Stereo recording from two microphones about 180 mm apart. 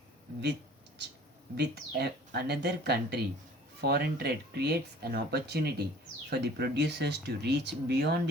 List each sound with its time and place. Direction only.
1.5 s speech: 65° right (ahead or behind)